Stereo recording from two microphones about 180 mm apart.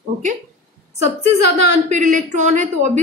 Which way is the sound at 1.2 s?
40° right (ahead or behind).